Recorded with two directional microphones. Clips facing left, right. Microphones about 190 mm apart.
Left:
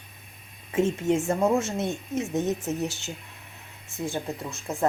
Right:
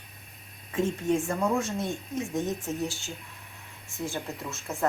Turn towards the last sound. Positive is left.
turn(degrees=15)  # may be behind; listen again after turning